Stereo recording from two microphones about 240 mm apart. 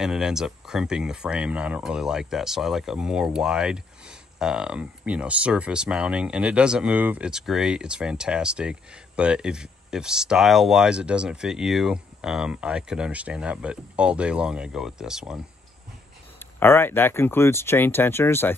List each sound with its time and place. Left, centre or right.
0.0 s speech: centre
16.3 s speech: centre